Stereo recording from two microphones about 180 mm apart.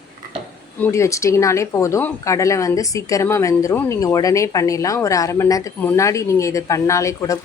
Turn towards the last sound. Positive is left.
turn(degrees=15)  # may be behind; listen again after turning